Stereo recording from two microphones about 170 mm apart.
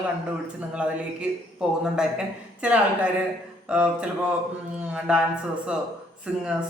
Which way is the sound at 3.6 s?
5° right (ahead or behind).